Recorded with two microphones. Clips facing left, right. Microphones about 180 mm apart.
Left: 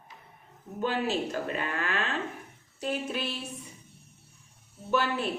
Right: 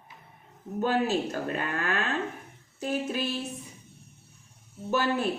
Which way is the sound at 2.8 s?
40° right (ahead or behind).